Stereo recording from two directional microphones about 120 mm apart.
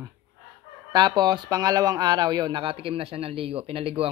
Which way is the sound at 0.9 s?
35° right (ahead or behind).